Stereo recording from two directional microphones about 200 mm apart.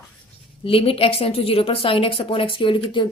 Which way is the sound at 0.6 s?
25° left (ahead or behind).